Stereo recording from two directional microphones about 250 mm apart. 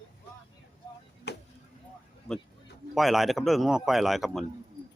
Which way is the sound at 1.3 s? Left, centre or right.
Left.